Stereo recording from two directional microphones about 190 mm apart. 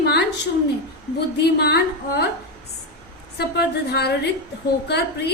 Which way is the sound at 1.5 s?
60° left (ahead or behind).